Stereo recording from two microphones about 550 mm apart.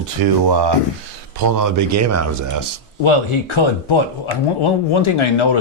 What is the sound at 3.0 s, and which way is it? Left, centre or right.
Speech, left.